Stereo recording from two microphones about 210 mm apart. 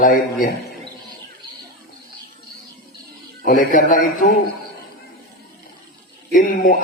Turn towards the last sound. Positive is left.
turn(degrees=40)  # may be behind; listen again after turning